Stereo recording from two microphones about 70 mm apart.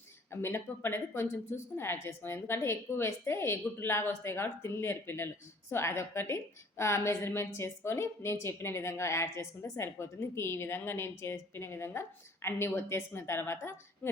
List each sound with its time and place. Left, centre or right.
0.3 s speech: left